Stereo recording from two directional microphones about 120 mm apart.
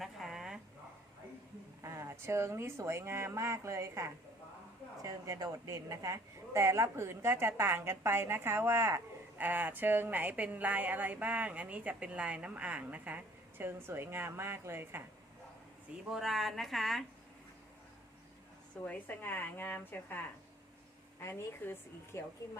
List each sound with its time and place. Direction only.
0.0 s a sound: centre (ahead or behind)
1.8 s a woman's voice: 25° right (ahead or behind)
16.1 s a woman's voice: centre (ahead or behind)
18.9 s a woman's voice: 15° left (ahead or behind)
21.2 s a woman's voice: 20° left (ahead or behind)